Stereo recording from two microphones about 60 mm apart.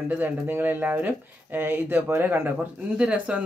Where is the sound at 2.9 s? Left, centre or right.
Right.